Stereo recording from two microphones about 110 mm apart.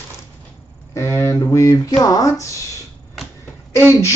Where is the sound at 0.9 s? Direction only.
25° left (ahead or behind).